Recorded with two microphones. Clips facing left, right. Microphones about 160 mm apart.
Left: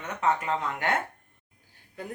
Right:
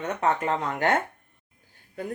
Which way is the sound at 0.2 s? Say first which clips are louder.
Even; 45° right (ahead or behind).